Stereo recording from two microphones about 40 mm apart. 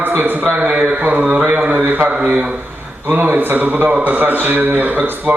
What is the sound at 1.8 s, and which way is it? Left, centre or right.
Speech, right.